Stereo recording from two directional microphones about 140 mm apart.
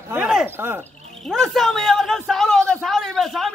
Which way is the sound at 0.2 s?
5° right (ahead or behind).